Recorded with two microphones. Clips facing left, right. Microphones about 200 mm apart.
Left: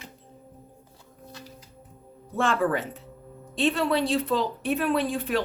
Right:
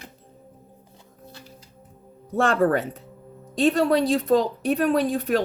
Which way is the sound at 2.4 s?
40° right (ahead or behind).